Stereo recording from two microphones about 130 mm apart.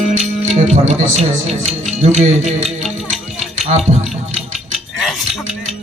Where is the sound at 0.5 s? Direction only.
60° right (ahead or behind).